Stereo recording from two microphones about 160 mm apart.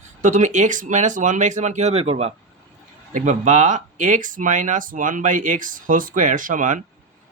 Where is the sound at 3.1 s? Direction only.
50° right (ahead or behind).